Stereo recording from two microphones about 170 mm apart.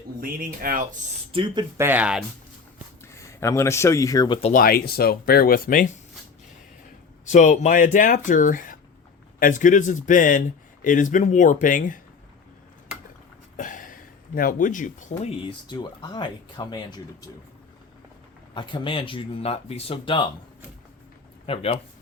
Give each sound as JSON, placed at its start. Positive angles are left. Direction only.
{"t": 0.2, "sound": "speech", "side_deg": -55}
{"t": 1.3, "sound": "speech", "side_deg": -30}
{"t": 1.8, "sound": "speech", "side_deg": -10}
{"t": 3.0, "sound": "speech", "side_deg": 15}
{"t": 4.5, "sound": "speech", "side_deg": 60}
{"t": 7.3, "sound": "speech", "side_deg": 45}
{"t": 13.6, "sound": "a sound", "side_deg": 50}
{"t": 14.3, "sound": "speech", "side_deg": 50}
{"t": 15.4, "sound": "speech", "side_deg": 25}
{"t": 18.5, "sound": "speech", "side_deg": 30}
{"t": 21.4, "sound": "speech", "side_deg": 35}